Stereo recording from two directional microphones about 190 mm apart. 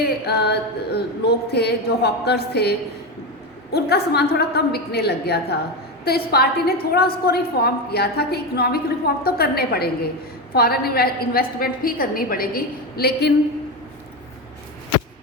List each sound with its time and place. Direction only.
0.0 s a woman's voice: 60° left (ahead or behind)